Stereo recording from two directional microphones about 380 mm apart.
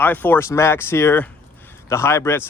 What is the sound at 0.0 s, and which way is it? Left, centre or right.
Speech, centre.